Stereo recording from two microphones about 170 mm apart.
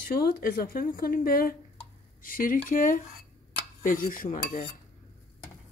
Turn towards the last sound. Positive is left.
turn(degrees=45)  # may be behind; listen again after turning